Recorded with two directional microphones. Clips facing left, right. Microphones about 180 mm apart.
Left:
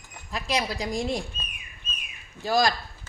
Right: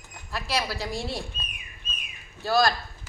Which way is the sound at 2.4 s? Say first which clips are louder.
Even; 15° left (ahead or behind).